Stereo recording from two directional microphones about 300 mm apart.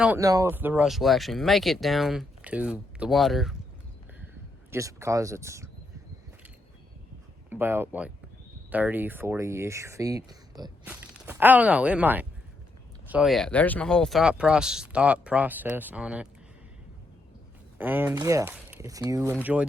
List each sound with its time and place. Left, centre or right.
0.0 s speech: centre
4.7 s speech: centre
7.5 s speech: centre
17.7 s speech: centre